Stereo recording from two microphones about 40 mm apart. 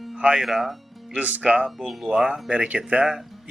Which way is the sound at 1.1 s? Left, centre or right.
Right.